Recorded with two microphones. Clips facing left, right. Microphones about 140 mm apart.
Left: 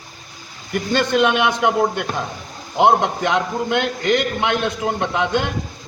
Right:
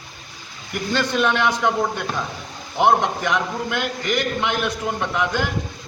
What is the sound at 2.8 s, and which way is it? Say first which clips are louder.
A man's voice: left 2 dB; 20° left (ahead or behind).